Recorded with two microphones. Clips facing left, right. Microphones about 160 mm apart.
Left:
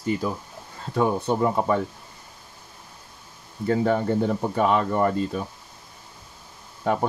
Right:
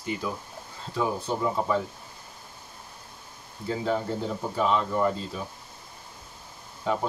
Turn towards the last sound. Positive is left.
turn(degrees=55)  # may be behind; listen again after turning